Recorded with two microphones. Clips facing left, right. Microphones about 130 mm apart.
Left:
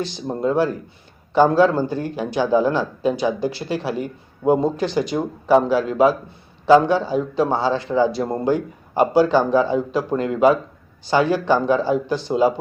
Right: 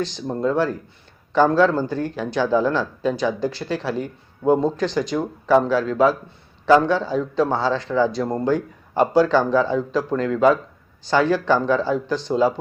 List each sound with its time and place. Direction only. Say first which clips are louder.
0.0 s speech: even; 10° left (ahead or behind)